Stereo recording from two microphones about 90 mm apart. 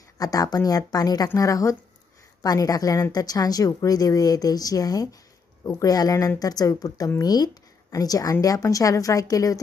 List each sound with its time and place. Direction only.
0.2 s a woman's voice: 45° left (ahead or behind)